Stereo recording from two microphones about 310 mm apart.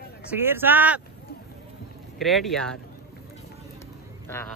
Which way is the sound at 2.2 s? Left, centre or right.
Centre.